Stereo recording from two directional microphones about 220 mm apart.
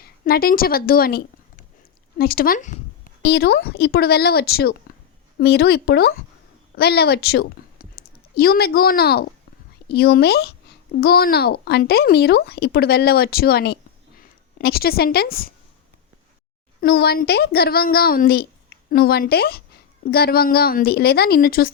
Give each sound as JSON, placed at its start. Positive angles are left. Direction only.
{"t": 0.0, "sound": "a woman's voice", "side_deg": 45}
{"t": 16.8, "sound": "a child's voice", "side_deg": 45}